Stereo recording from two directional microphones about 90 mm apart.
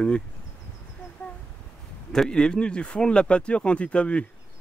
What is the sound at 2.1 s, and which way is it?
Speech, 5° left (ahead or behind).